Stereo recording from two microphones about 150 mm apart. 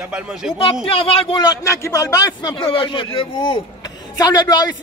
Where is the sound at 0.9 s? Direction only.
40° left (ahead or behind).